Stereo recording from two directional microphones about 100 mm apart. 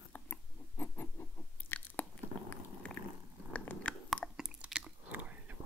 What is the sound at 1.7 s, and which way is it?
Biting, 20° left (ahead or behind).